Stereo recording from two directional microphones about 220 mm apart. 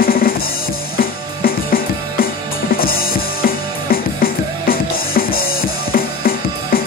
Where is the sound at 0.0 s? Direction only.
40° left (ahead or behind).